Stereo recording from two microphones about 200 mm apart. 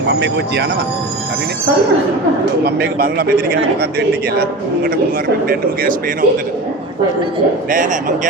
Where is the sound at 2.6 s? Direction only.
50° right (ahead or behind).